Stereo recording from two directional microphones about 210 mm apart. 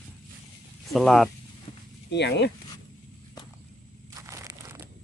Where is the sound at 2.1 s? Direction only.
55° left (ahead or behind).